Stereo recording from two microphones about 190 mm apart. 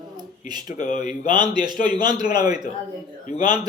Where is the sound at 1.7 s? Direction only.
25° right (ahead or behind).